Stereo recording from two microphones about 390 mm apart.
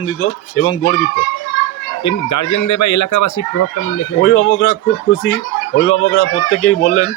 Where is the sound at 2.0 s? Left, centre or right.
Left.